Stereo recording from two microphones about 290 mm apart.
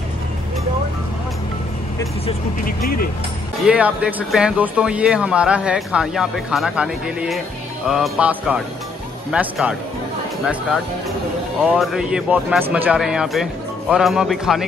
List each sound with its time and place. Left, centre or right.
2.6 s speech: left
3.6 s speech: centre